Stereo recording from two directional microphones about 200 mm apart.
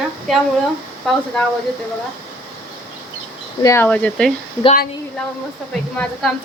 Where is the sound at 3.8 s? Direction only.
5° left (ahead or behind).